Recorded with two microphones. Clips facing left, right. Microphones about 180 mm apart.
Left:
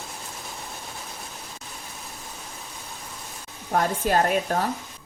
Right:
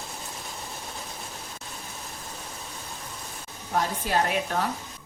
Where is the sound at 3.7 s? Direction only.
50° left (ahead or behind).